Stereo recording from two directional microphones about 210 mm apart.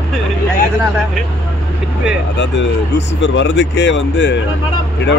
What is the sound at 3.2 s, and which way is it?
Speech, 60° left (ahead or behind).